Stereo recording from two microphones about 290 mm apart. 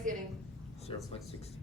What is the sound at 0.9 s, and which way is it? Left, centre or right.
Speech, centre.